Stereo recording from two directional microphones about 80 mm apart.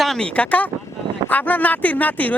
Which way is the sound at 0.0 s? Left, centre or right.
Centre.